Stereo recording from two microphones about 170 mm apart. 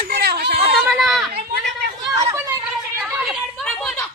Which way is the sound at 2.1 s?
20° right (ahead or behind).